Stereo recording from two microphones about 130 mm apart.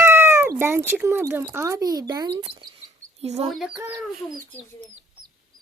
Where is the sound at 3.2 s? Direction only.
55° right (ahead or behind).